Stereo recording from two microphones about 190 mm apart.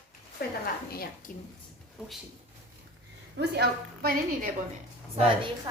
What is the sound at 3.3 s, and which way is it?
Speech, 60° right (ahead or behind).